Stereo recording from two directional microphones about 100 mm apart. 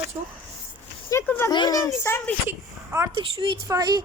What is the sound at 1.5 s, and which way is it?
Speech, 45° left (ahead or behind).